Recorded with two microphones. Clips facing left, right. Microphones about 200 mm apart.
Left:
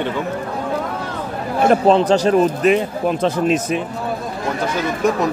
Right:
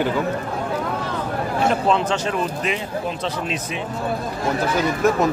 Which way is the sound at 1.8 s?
35° left (ahead or behind).